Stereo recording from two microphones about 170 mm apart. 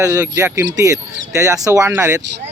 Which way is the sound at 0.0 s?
20° right (ahead or behind).